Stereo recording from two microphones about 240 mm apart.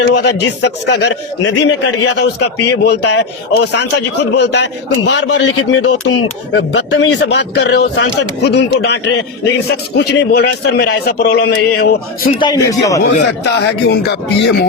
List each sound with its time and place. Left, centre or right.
0.0 s a man's voice: left
10.0 s a man's voice: left
12.4 s a man's voice: centre
13.1 s a man's voice: left